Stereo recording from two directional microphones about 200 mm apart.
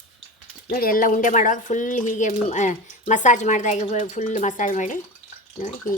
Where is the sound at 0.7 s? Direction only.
45° left (ahead or behind).